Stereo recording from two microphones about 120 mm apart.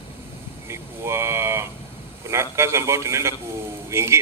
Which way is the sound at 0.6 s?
20° right (ahead or behind).